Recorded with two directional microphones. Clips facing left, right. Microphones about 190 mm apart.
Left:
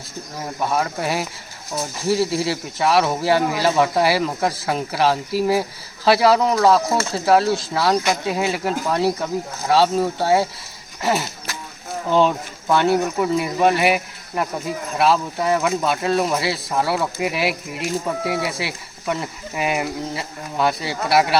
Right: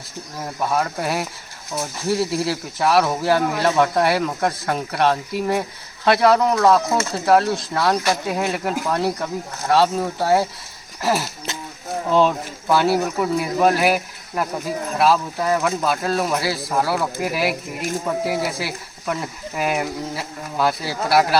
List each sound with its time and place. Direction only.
0.3 s speech: centre (ahead or behind)
11.5 s a sound: 25° right (ahead or behind)
12.0 s speech: centre (ahead or behind)